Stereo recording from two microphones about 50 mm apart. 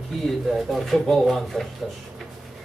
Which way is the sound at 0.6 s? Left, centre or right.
Centre.